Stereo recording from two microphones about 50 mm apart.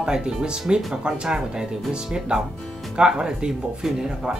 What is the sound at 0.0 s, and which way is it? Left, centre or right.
Speech, centre.